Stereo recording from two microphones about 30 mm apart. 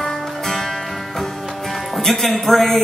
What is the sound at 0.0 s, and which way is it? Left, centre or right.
Music, centre.